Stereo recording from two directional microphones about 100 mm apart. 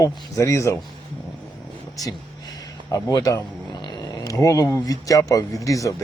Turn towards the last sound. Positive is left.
turn(degrees=35)  # may be behind; listen again after turning